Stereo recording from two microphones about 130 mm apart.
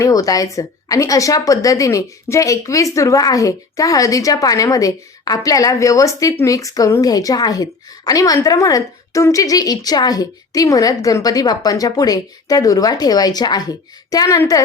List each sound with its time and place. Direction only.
0.0 s a woman's voice: 25° left (ahead or behind)